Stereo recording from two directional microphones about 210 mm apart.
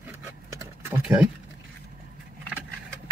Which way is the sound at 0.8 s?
5° right (ahead or behind).